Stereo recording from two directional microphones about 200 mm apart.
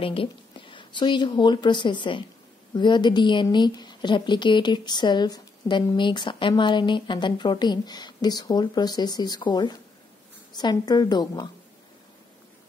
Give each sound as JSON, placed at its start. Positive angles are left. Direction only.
{"t": 0.0, "sound": "a woman's voice", "side_deg": 25}